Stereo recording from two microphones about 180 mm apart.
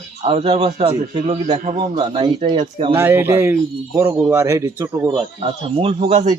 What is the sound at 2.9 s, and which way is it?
Speech, 10° right (ahead or behind).